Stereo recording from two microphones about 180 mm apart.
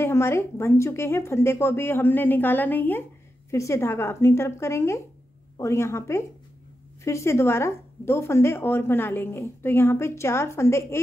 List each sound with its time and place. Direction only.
0.0 s speech: 15° left (ahead or behind)